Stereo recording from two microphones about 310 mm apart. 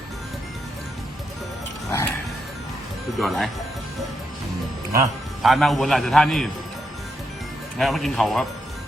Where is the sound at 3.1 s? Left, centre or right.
Centre.